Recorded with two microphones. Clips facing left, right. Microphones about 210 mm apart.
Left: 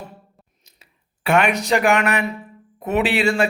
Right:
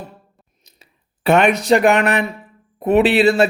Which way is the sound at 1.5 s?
15° left (ahead or behind).